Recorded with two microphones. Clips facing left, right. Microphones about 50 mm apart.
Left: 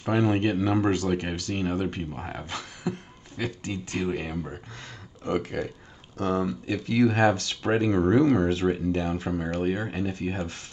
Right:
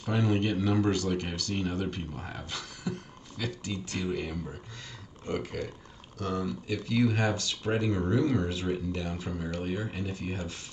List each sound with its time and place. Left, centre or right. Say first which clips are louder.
0.0 s speech: left 5 dB; left
5.5 s speech: left 5 dB; left